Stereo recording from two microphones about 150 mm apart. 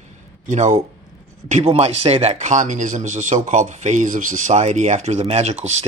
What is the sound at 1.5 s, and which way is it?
Speech, 45° right (ahead or behind).